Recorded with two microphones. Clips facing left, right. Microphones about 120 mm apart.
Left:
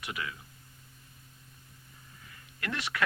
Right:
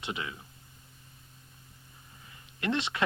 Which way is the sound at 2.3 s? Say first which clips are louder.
Right 7 dB; 25° right (ahead or behind).